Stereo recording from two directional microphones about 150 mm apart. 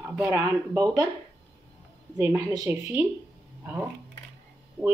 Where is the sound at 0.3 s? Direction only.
20° right (ahead or behind).